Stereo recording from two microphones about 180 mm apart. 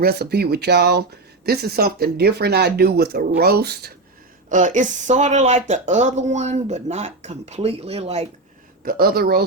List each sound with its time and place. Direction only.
0.0 s speech: 60° right (ahead or behind)
4.4 s speech: 45° right (ahead or behind)
8.8 s speech: 55° right (ahead or behind)